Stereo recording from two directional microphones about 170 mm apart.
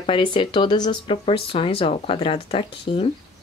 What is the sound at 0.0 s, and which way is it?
Speech, 30° left (ahead or behind).